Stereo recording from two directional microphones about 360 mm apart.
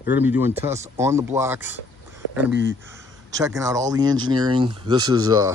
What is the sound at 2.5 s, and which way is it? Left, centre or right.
Speech, right.